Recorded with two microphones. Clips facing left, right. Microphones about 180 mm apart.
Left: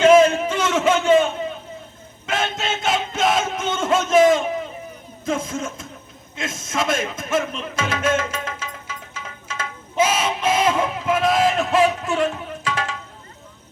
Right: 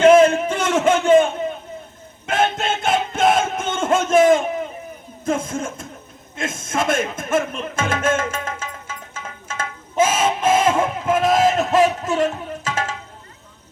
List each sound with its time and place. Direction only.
0.0 s a sound: 55° right (ahead or behind)
2.2 s music: 55° right (ahead or behind)
5.2 s speech: 50° right (ahead or behind)
6.3 s music: 50° right (ahead or behind)